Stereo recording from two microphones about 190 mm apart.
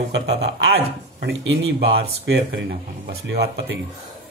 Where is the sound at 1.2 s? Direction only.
65° right (ahead or behind).